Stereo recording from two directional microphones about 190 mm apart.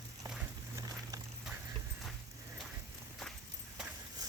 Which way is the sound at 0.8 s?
20° right (ahead or behind).